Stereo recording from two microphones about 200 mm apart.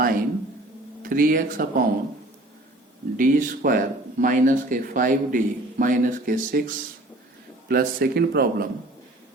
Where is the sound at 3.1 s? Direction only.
45° right (ahead or behind).